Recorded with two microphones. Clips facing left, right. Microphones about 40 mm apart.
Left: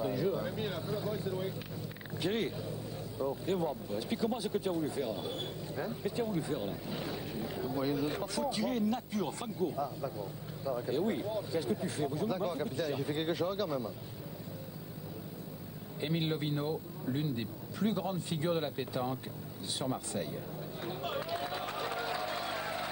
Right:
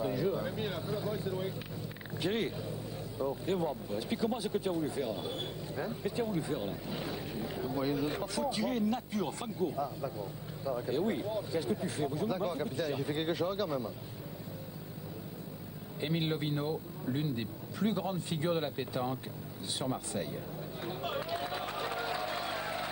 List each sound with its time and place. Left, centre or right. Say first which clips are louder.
0.0 s vehicle: even; centre
2.1 s speech: even; centre
16.0 s speech: even; centre
20.8 s a sound: right 1 dB; centre